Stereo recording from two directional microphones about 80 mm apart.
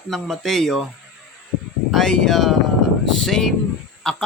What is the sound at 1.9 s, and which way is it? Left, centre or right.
Speech, centre.